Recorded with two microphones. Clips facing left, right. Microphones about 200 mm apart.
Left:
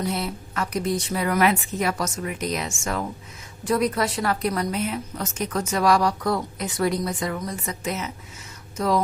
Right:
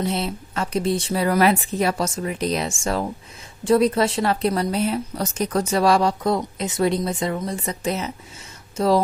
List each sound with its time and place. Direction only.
0.0 s a woman's voice: 25° right (ahead or behind)